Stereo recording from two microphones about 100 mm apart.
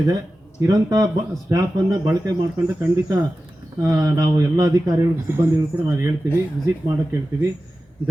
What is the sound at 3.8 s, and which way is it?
Speech, 35° right (ahead or behind).